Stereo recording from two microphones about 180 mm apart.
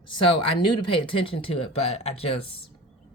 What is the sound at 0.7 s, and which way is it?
Speech, 30° left (ahead or behind).